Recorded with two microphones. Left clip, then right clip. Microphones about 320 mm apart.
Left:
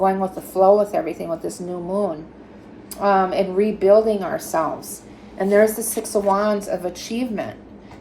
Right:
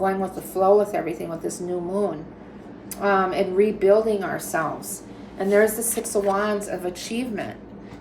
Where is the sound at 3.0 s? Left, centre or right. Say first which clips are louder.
Left 3 dB; centre.